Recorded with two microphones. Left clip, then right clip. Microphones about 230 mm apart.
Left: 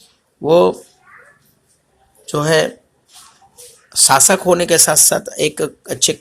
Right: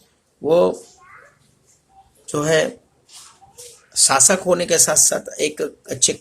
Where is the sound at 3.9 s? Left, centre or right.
Left.